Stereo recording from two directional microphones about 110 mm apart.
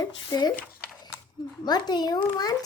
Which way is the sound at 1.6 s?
40° left (ahead or behind).